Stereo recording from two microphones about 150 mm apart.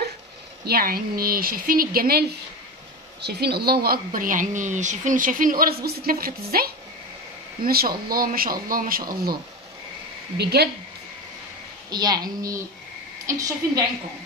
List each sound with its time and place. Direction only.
0.7 s speech: 85° right
10.3 s a woman's voice: 90° right
11.9 s a woman's voice: 25° right (ahead or behind)